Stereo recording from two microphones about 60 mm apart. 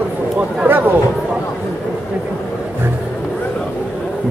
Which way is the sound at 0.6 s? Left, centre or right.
Right.